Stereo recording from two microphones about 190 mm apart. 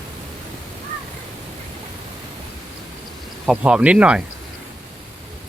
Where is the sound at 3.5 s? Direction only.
5° right (ahead or behind).